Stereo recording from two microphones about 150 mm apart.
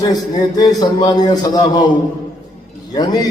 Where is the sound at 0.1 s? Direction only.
25° left (ahead or behind).